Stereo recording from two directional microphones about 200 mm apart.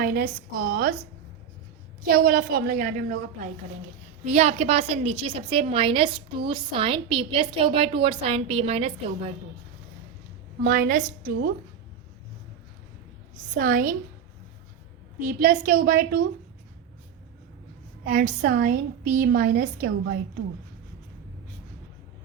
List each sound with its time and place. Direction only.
0.0 s a woman's voice: 50° right (ahead or behind)
2.0 s a woman's voice: 45° right (ahead or behind); by 9.3 s 30° right (ahead or behind)
10.6 s a woman's voice: 45° right (ahead or behind)
13.5 s a woman's voice: 45° right (ahead or behind)
15.4 s a woman's voice: 45° right (ahead or behind)
18.0 s a woman's voice: 45° right (ahead or behind)